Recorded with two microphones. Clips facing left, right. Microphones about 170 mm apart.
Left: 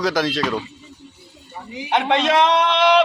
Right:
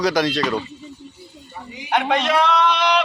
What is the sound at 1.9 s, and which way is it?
A man's voice, 25° left (ahead or behind).